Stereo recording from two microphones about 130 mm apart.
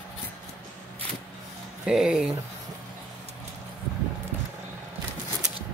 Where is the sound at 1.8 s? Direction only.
5° right (ahead or behind).